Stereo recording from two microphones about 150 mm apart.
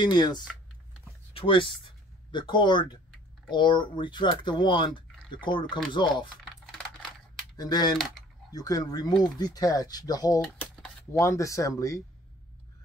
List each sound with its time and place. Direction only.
0.0 s speech: 30° left (ahead or behind)
6.6 s computer keyboard: centre (ahead or behind)
7.5 s speech: 25° left (ahead or behind)